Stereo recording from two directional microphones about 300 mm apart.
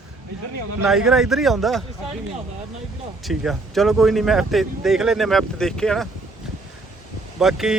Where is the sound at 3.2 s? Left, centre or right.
Centre.